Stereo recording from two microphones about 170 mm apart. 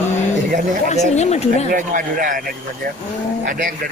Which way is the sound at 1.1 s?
40° left (ahead or behind).